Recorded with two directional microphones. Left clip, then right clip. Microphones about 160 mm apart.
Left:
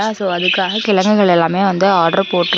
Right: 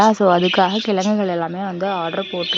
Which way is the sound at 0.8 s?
5° left (ahead or behind).